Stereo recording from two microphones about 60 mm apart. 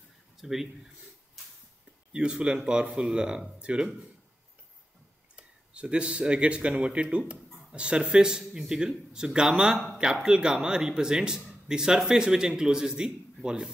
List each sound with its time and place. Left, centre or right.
0.4 s speech: centre
2.1 s speech: centre
5.3 s speech: centre